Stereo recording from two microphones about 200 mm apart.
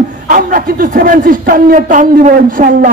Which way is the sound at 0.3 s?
45° right (ahead or behind).